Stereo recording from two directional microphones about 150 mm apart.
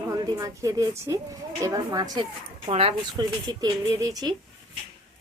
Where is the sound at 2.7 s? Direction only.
40° right (ahead or behind).